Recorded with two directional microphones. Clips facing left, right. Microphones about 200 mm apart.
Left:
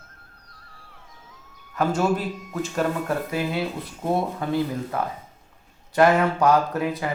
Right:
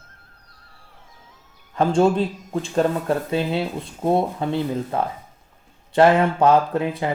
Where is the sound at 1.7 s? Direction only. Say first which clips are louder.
Right 5 dB; 25° right (ahead or behind).